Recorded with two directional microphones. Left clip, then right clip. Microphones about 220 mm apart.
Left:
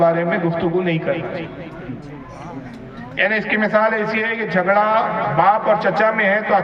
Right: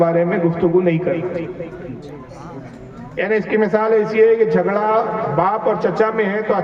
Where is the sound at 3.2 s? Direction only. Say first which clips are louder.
Even; 15° left (ahead or behind).